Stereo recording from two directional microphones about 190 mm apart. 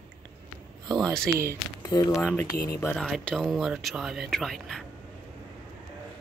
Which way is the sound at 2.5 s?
55° left (ahead or behind).